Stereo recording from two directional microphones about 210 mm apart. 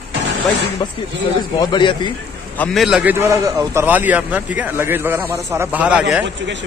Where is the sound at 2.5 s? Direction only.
5° left (ahead or behind).